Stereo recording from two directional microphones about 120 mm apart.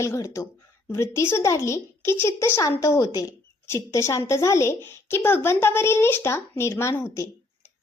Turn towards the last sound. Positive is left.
turn(degrees=20)  # may be behind; listen again after turning